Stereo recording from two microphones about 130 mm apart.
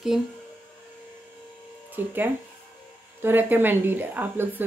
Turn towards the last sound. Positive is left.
turn(degrees=-15)  # may be behind; listen again after turning